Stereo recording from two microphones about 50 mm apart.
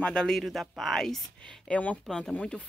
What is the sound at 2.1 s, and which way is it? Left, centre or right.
Speech, centre.